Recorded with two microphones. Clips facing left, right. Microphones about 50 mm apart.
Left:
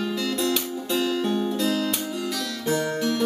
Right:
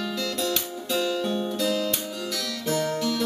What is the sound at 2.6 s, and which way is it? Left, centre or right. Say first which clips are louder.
Music: left 1 dB; centre.